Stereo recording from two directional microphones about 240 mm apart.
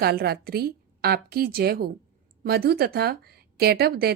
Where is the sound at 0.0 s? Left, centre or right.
Right.